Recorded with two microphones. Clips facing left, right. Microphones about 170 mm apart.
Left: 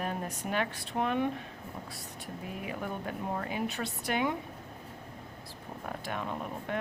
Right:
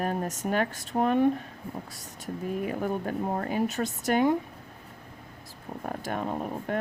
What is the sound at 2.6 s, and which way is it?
Speech, 45° right (ahead or behind).